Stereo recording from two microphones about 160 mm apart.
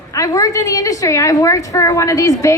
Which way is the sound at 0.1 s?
20° left (ahead or behind).